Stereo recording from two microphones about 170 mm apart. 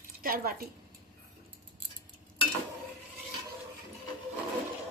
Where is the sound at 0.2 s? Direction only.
60° right (ahead or behind).